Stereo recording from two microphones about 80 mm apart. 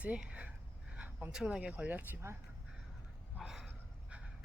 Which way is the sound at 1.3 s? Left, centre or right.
Centre.